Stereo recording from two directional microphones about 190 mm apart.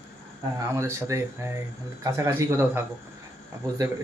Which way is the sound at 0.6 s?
15° right (ahead or behind).